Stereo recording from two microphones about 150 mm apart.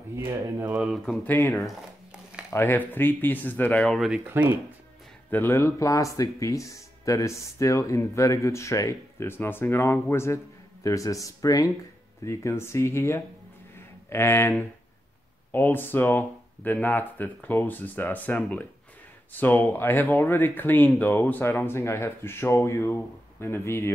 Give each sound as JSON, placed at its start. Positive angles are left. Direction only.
{"t": 0.7, "sound": "speech", "side_deg": 0}
{"t": 1.2, "sound": "speech", "side_deg": 20}
{"t": 2.5, "sound": "speech", "side_deg": 15}
{"t": 3.8, "sound": "speech", "side_deg": 0}
{"t": 4.3, "sound": "speech", "side_deg": -15}
{"t": 5.3, "sound": "speech", "side_deg": 15}
{"t": 13.7, "sound": "a sound", "side_deg": 15}
{"t": 15.5, "sound": "speech", "side_deg": 15}